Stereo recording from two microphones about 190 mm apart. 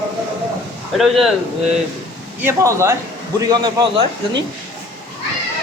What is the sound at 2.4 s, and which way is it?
A man's voice, 15° right (ahead or behind).